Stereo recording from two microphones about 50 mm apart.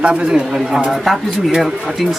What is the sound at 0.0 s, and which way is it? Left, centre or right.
Speech, right.